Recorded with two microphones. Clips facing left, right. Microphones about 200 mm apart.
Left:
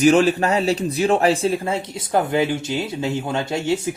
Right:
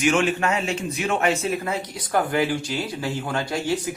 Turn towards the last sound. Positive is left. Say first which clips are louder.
# left 3 dB
turn(degrees=25)  # may be behind; listen again after turning